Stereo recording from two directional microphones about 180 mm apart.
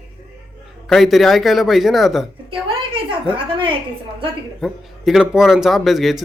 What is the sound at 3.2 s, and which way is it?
Speech, 30° right (ahead or behind).